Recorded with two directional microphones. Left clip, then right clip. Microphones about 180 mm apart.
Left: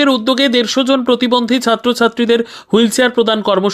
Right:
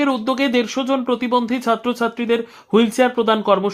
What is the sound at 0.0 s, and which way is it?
Speech, 20° left (ahead or behind).